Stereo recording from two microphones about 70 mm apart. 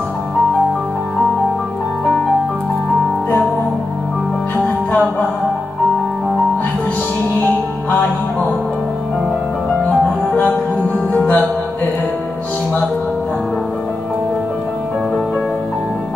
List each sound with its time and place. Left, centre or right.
9.8 s music: left